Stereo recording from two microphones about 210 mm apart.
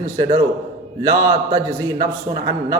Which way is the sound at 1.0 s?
15° right (ahead or behind).